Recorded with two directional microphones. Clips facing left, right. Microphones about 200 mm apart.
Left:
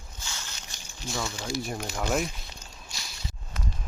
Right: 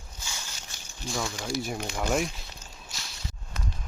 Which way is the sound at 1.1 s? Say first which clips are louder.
Right 1 dB; centre (ahead or behind).